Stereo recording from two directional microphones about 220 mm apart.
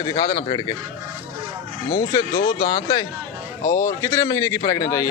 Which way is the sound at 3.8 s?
15° left (ahead or behind).